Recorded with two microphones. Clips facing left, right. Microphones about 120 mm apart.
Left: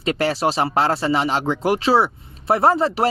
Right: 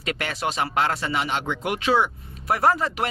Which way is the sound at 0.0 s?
30° left (ahead or behind).